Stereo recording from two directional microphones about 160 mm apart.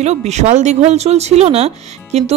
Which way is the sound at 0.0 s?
45° right (ahead or behind).